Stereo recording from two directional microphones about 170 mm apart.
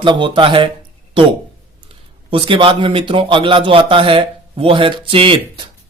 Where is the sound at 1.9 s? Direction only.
30° right (ahead or behind).